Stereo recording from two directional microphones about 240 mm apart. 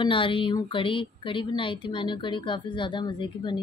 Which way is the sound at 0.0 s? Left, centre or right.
Left.